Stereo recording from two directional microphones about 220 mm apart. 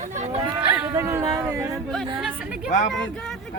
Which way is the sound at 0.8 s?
15° right (ahead or behind).